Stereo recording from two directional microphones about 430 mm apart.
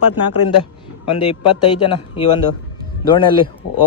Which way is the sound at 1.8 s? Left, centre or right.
Centre.